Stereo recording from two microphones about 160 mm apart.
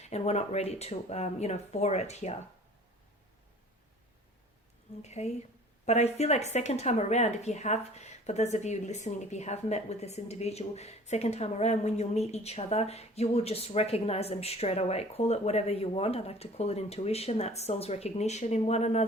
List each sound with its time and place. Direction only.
0.0 s speech: 45° left (ahead or behind)
5.0 s a woman's voice: 45° left (ahead or behind)